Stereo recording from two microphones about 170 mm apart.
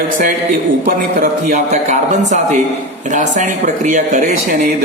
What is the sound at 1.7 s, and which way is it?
Speech, 45° right (ahead or behind).